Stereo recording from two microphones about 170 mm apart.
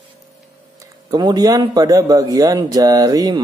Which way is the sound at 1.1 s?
25° right (ahead or behind).